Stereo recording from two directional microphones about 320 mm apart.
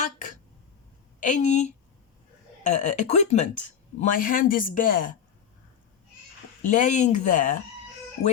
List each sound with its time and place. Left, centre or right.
1.2 s speech: left
6.6 s speech: left